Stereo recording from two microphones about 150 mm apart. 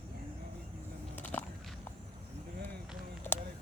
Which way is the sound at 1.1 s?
10° left (ahead or behind).